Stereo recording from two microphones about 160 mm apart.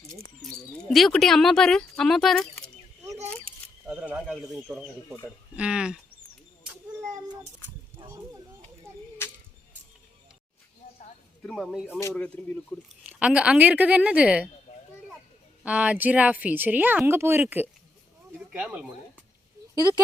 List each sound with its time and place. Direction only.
0.9 s speech: centre (ahead or behind)
3.8 s speech: 10° right (ahead or behind)
7.9 s a sound: 20° right (ahead or behind)
11.4 s speech: centre (ahead or behind)
11.9 s speech: 10° left (ahead or behind)
13.1 s speech: 10° right (ahead or behind)
15.6 s speech: 10° right (ahead or behind)
18.3 s a sound: 10° right (ahead or behind)